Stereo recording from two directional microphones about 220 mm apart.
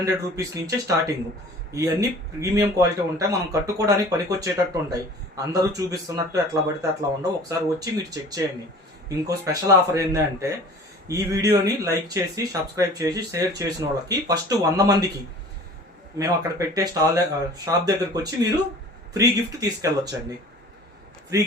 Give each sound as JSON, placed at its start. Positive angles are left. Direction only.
{"t": 0.0, "sound": "speech", "side_deg": -15}
{"t": 16.1, "sound": "speech", "side_deg": -15}